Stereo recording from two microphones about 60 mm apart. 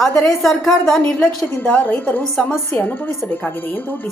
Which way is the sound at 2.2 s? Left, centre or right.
Centre.